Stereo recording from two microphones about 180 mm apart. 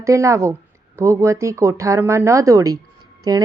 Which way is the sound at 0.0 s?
15° right (ahead or behind).